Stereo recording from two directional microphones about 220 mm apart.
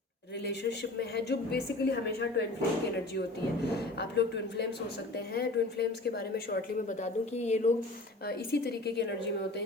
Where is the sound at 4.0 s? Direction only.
50° left (ahead or behind); by 7.7 s 30° left (ahead or behind).